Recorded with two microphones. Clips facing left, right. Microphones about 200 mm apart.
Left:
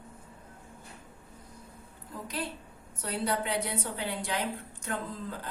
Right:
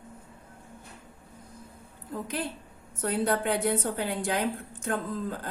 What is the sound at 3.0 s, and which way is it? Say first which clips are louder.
A woman's voice: right 5 dB; 50° right (ahead or behind).